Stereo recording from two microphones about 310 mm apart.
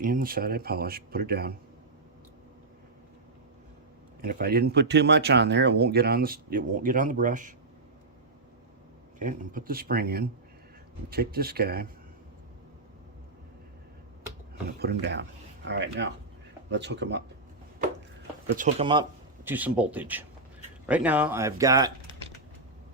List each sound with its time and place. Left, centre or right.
0.0 s speech: right
4.2 s speech: right
9.1 s speech: right
14.8 s speech: right
18.5 s speech: right
19.5 s speech: centre